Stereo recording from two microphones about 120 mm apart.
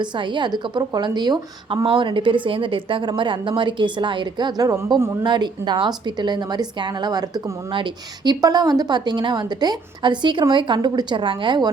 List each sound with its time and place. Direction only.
0.0 s a woman's voice: 40° right (ahead or behind)
5.2 s a woman's voice: 40° right (ahead or behind)